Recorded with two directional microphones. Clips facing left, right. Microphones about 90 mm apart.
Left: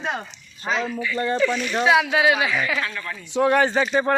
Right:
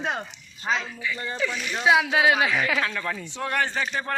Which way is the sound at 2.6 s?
65° right (ahead or behind).